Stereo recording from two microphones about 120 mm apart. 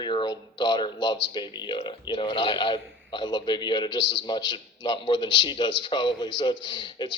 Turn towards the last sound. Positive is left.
turn(degrees=40)  # may be behind; listen again after turning